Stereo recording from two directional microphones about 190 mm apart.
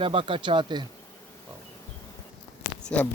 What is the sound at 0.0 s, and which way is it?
Speech, 25° right (ahead or behind).